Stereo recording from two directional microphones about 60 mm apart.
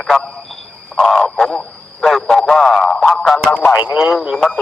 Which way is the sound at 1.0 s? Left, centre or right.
Centre.